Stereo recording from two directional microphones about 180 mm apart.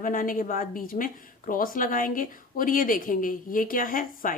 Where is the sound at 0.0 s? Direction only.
50° left (ahead or behind).